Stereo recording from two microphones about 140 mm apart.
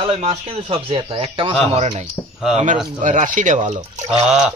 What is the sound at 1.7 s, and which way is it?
Speech, 55° right (ahead or behind).